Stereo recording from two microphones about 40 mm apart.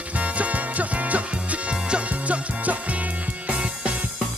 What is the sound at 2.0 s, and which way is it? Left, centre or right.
Music, right.